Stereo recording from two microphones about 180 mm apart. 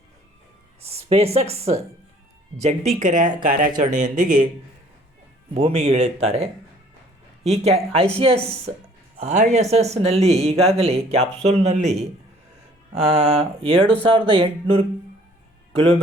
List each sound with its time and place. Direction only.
0.8 s speech: 35° right (ahead or behind)
5.5 s speech: 35° right (ahead or behind)
9.1 s speech: 40° right (ahead or behind)
13.1 s speech: 35° right (ahead or behind)
14.0 s music: 30° right (ahead or behind)
15.7 s speech: 35° right (ahead or behind)